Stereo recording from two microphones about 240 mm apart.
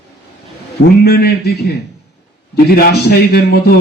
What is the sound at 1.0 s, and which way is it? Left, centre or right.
Speech, left.